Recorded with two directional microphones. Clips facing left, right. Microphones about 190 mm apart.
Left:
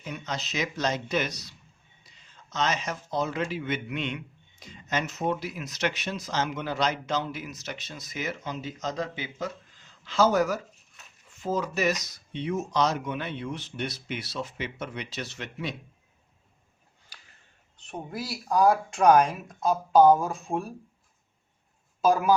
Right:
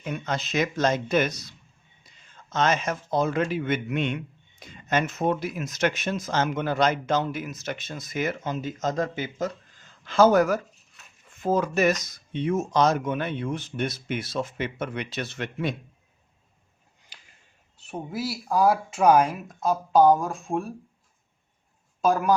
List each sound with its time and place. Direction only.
0.0 s speech: 55° right (ahead or behind)
17.7 s speech: 5° right (ahead or behind)
22.0 s speech: centre (ahead or behind)